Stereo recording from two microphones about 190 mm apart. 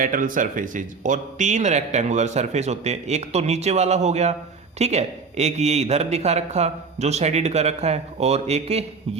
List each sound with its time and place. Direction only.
0.0 s speech: 45° right (ahead or behind)